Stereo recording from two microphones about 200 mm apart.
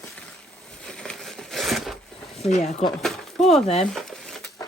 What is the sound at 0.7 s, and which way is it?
Crumpling, 5° left (ahead or behind).